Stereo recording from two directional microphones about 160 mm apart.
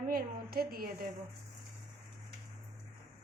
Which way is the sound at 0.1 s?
70° right (ahead or behind).